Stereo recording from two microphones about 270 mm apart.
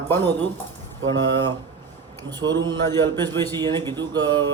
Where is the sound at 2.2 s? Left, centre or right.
Centre.